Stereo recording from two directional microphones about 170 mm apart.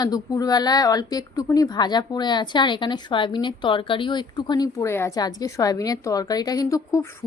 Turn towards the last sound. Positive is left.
turn(degrees=20)  # may be behind; listen again after turning